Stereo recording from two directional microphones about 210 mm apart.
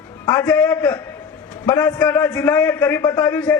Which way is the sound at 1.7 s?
5° left (ahead or behind).